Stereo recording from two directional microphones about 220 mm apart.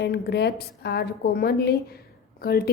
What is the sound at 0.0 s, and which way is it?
A woman's voice, 50° left (ahead or behind).